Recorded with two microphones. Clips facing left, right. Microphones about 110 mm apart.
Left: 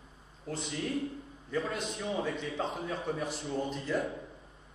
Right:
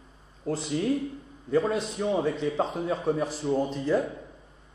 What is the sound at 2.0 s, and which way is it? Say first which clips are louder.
A man's voice: right 8 dB; 35° right (ahead or behind).